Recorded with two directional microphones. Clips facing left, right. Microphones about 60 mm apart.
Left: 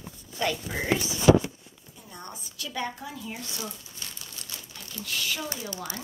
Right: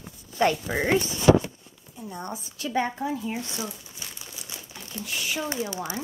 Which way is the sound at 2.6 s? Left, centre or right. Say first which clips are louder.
Right 7 dB; right.